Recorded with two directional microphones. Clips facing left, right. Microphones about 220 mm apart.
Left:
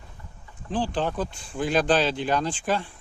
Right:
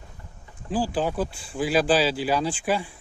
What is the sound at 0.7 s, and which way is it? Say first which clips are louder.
Speech: right 1 dB; 10° right (ahead or behind).